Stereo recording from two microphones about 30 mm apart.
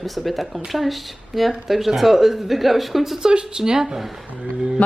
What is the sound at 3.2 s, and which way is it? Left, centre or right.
Speech, right.